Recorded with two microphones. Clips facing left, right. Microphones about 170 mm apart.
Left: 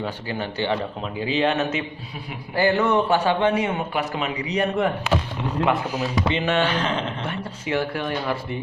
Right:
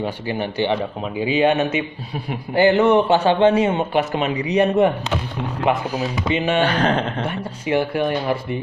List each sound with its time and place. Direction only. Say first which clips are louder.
0.0 s a man's voice: right 4 dB; 15° right (ahead or behind)
6.3 s speech: right 5 dB; 10° right (ahead or behind)
6.7 s speech: right 5 dB; 40° right (ahead or behind)
7.7 s speech: right 5 dB; 15° right (ahead or behind)